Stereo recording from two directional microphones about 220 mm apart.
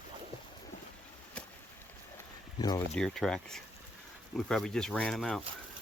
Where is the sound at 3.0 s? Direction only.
Centre (ahead or behind).